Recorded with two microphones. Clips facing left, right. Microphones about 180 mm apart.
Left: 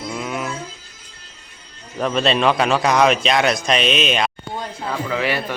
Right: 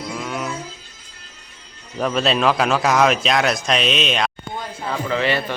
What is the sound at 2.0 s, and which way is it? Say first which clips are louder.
A man's voice: left 1 dB; centre (ahead or behind).